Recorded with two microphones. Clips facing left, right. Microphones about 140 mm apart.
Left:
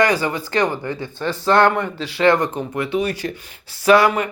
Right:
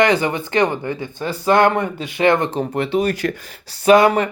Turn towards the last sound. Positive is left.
turn(degrees=-25)  # may be behind; listen again after turning